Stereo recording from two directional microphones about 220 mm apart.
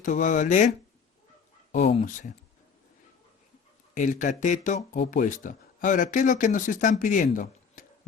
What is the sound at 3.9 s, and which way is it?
Speech, 35° left (ahead or behind).